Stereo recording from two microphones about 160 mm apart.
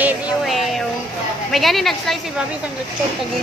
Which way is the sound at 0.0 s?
Centre (ahead or behind).